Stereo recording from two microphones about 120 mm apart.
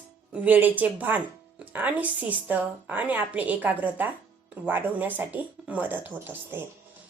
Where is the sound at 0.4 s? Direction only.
15° right (ahead or behind).